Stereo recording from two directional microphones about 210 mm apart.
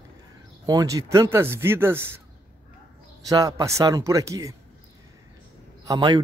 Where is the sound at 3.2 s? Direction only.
15° right (ahead or behind).